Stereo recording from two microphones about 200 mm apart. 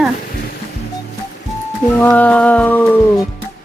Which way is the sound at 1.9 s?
10° left (ahead or behind).